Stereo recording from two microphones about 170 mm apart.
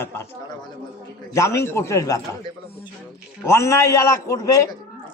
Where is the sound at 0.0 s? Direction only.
15° left (ahead or behind).